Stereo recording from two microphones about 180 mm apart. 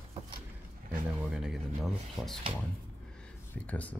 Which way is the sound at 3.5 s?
10° left (ahead or behind).